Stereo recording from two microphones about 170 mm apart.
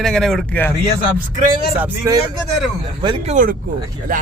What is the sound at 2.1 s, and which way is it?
Speech, 20° right (ahead or behind).